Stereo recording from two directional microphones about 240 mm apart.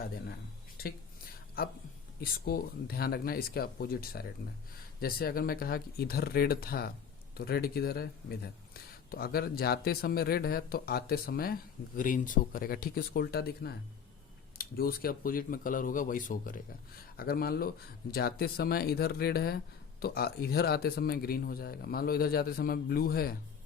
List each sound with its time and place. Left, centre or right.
2.2 s speech: left